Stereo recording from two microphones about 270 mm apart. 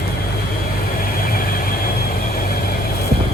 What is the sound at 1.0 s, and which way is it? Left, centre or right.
Vehicle, left.